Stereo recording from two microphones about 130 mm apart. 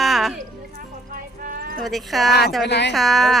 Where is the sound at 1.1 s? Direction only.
90° right.